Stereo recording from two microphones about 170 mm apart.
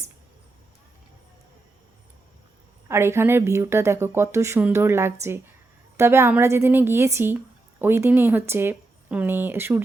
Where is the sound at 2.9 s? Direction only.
15° right (ahead or behind).